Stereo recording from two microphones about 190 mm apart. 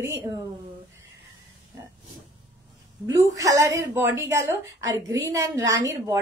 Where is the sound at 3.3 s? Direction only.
15° right (ahead or behind).